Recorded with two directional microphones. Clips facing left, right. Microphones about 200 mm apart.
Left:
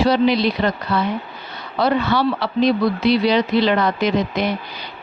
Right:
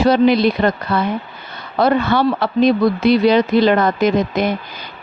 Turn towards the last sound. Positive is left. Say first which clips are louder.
# right 3 dB
turn(degrees=-50)  # may be behind; listen again after turning